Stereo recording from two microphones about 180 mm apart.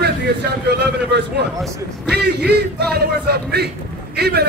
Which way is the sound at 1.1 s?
70° right (ahead or behind).